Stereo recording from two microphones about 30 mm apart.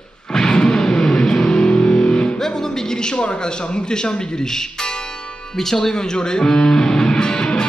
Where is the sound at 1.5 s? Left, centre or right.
Left.